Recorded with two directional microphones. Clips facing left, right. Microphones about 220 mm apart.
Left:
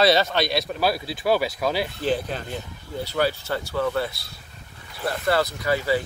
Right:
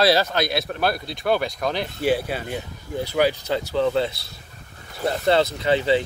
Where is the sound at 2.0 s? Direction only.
10° right (ahead or behind).